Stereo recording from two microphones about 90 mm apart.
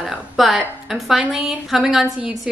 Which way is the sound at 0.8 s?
5° right (ahead or behind).